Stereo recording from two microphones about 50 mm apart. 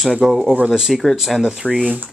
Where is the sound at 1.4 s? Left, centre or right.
Right.